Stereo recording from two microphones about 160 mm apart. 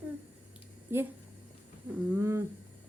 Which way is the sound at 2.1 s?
20° right (ahead or behind).